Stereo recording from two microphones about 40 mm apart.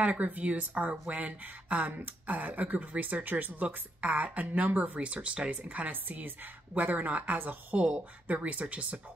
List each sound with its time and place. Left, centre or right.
0.0 s speech: right
4.9 s speech: right
5.9 s a woman's voice: right